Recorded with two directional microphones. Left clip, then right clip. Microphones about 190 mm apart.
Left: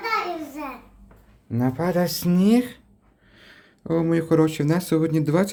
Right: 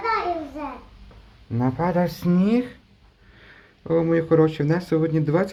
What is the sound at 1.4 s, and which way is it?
Speech, 20° left (ahead or behind).